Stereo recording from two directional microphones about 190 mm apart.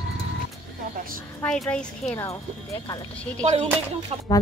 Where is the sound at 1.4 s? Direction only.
5° left (ahead or behind).